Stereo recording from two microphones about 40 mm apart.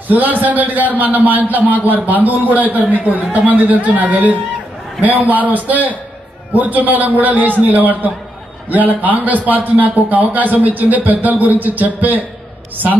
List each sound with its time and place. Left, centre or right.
0.1 s a man's voice: right
5.3 s a man's voice: right
9.0 s a man's voice: right